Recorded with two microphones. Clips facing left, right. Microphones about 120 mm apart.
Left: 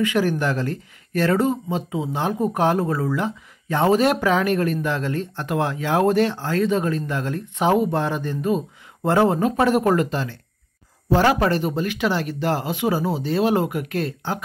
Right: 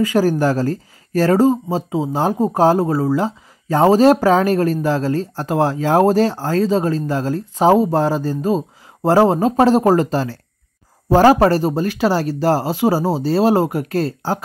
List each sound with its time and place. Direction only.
0.0 s speech: 35° right (ahead or behind)